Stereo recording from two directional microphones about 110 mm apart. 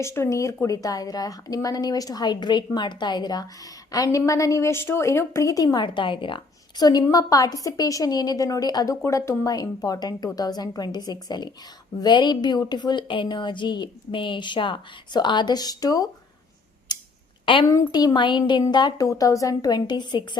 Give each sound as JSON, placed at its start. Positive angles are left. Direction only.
{"t": 0.0, "sound": "a woman's voice", "side_deg": 25}
{"t": 16.9, "sound": "a sound", "side_deg": 40}
{"t": 17.4, "sound": "a woman's voice", "side_deg": 50}
{"t": 17.7, "sound": "a woman's voice", "side_deg": 35}